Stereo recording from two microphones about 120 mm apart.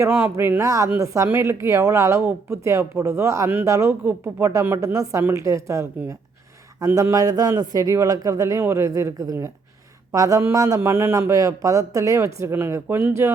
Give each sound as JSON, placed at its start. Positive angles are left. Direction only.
{"t": 0.1, "sound": "a woman's voice", "side_deg": -15}
{"t": 10.8, "sound": "a woman's voice", "side_deg": -20}